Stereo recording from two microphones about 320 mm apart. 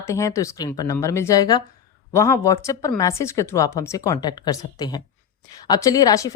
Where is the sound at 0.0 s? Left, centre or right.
Centre.